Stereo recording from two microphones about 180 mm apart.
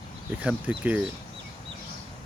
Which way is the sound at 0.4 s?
10° right (ahead or behind).